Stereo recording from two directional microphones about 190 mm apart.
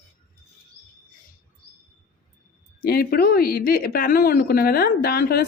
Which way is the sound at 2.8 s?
55° left (ahead or behind).